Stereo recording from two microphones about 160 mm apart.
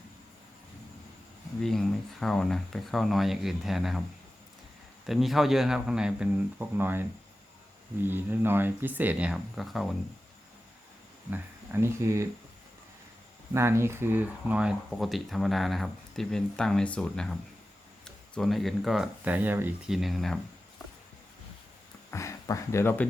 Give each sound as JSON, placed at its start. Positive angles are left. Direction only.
{"t": 1.6, "sound": "speech", "side_deg": 0}
{"t": 5.0, "sound": "speech", "side_deg": 0}
{"t": 8.0, "sound": "speech", "side_deg": -15}
{"t": 11.3, "sound": "speech", "side_deg": -15}
{"t": 13.5, "sound": "speech", "side_deg": -15}
{"t": 22.1, "sound": "speech", "side_deg": 20}